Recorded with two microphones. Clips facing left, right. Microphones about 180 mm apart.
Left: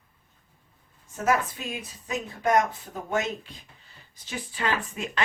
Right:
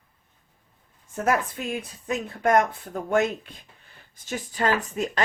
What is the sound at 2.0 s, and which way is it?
Speech, 55° right (ahead or behind).